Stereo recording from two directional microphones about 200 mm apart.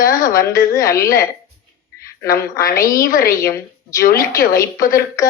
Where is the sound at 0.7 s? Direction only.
15° left (ahead or behind).